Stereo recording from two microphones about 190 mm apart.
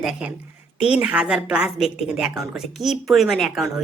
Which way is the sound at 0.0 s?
5° right (ahead or behind).